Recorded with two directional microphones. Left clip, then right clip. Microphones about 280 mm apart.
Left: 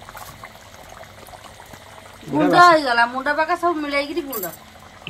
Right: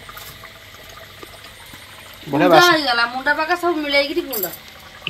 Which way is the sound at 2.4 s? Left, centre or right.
Centre.